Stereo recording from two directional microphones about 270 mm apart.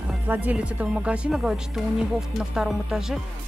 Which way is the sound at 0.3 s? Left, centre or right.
Centre.